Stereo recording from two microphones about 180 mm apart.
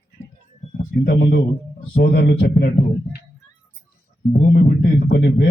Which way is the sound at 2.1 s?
70° left (ahead or behind).